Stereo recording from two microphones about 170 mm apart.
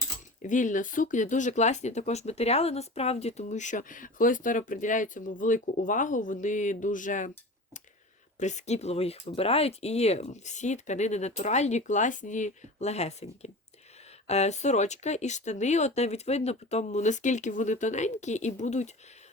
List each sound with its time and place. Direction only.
0.4 s speech: 50° left (ahead or behind)